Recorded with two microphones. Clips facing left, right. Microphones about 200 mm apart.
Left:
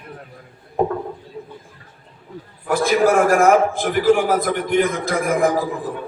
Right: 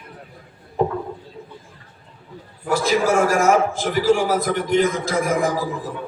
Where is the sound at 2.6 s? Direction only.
55° left (ahead or behind).